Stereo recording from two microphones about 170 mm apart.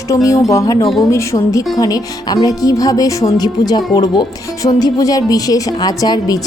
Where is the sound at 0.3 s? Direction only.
20° left (ahead or behind).